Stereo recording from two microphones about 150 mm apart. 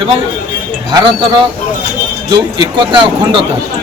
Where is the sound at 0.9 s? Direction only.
30° right (ahead or behind).